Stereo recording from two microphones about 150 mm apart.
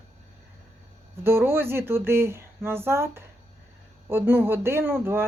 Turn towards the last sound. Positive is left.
turn(degrees=-15)  # may be behind; listen again after turning